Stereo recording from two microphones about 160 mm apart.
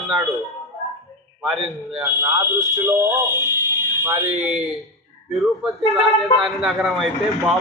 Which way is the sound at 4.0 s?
20° right (ahead or behind).